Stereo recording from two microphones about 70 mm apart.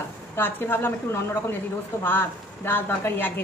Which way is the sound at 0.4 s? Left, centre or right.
Left.